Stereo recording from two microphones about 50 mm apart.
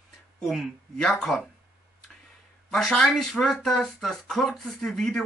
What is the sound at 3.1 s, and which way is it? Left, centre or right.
Speech, centre.